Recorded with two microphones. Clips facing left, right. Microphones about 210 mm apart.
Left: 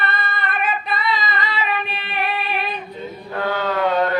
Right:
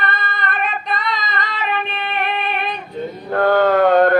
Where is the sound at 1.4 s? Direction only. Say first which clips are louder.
Right 1 dB; 50° right (ahead or behind).